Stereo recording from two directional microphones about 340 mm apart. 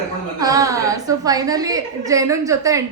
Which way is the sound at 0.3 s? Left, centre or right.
Centre.